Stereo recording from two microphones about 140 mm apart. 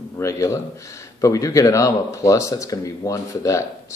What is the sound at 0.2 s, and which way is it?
Speech, 20° left (ahead or behind).